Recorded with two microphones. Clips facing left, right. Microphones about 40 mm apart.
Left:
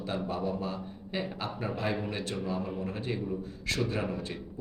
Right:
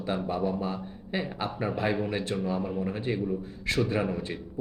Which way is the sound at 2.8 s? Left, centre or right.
Centre.